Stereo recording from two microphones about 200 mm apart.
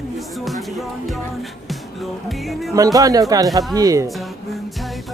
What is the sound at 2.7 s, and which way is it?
Speech, 15° right (ahead or behind).